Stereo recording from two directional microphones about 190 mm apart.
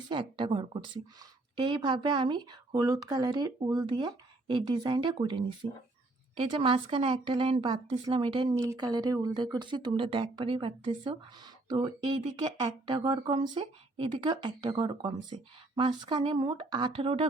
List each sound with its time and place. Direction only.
0.1 s a woman's voice: 25° right (ahead or behind)